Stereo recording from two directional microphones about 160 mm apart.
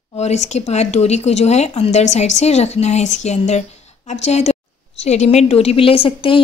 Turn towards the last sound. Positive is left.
turn(degrees=35)  # may be behind; listen again after turning